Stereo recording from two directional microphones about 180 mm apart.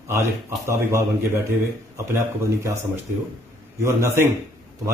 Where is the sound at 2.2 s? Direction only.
15° right (ahead or behind).